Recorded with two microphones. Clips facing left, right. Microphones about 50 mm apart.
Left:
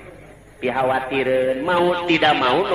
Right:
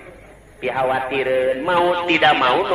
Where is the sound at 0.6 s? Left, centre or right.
Centre.